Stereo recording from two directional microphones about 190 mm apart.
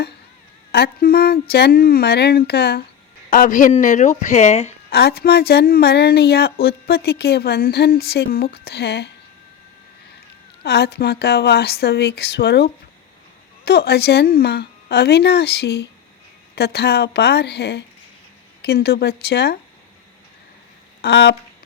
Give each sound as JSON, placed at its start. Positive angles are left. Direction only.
{"t": 0.7, "sound": "a woman's voice", "side_deg": 55}
{"t": 3.2, "sound": "speech", "side_deg": 45}
{"t": 4.9, "sound": "a woman's voice", "side_deg": 60}
{"t": 10.6, "sound": "a woman's voice", "side_deg": 60}
{"t": 21.0, "sound": "a woman's voice", "side_deg": 60}